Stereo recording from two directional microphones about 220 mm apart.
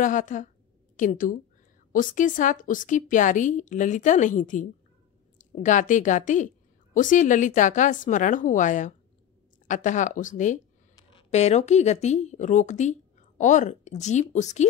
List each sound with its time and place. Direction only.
0.0 s a woman's voice: 35° left (ahead or behind)